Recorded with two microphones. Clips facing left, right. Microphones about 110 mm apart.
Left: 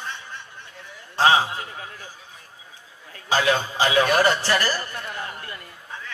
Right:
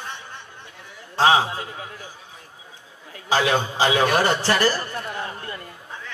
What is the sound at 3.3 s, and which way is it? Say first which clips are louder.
Speech: right 1 dB; 20° right (ahead or behind).